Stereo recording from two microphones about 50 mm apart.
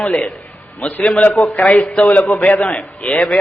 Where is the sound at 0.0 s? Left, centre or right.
Left.